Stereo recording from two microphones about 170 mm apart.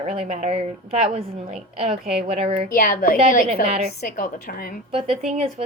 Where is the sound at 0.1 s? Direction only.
40° right (ahead or behind).